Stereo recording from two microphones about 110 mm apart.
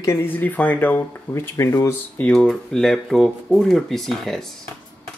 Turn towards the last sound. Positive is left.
turn(degrees=5)  # may be behind; listen again after turning